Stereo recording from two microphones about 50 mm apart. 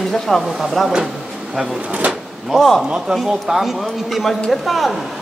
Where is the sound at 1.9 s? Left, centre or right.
Right.